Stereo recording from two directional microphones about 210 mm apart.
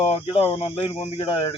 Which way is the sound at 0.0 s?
30° left (ahead or behind).